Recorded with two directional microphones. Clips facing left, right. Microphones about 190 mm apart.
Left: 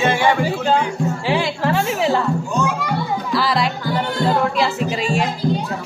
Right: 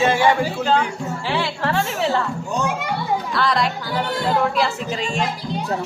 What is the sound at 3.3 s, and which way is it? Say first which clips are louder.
Music: left 3 dB; 5° left (ahead or behind).